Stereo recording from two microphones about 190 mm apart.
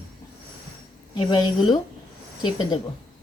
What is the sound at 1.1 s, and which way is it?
Speech, 25° left (ahead or behind).